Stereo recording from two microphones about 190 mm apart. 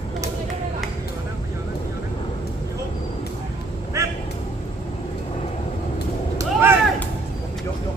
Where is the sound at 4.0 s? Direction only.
15° right (ahead or behind).